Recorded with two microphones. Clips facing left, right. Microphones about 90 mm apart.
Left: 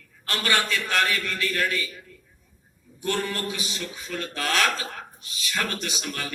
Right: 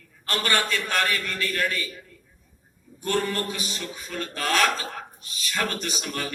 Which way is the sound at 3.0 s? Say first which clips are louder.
Right 2 dB; 40° right (ahead or behind).